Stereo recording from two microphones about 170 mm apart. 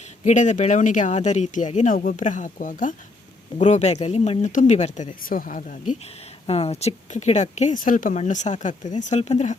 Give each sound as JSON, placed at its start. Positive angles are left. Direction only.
{"t": 0.3, "sound": "speech", "side_deg": 45}
{"t": 6.5, "sound": "speech", "side_deg": 35}